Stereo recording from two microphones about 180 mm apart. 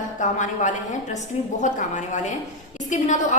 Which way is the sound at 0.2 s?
45° left (ahead or behind).